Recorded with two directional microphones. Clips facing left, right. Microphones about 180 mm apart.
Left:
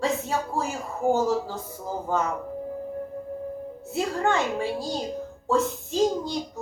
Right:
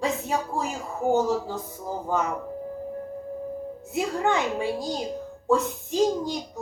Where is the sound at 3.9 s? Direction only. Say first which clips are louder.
Even; 15° right (ahead or behind).